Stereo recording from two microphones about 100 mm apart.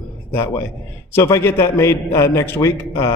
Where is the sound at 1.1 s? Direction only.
25° left (ahead or behind).